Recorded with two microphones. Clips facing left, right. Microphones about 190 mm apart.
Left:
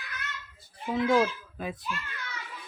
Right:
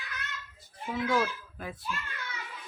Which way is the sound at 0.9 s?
25° left (ahead or behind).